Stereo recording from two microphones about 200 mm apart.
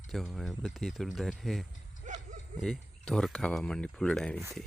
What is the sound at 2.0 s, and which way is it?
Livestock, 40° right (ahead or behind).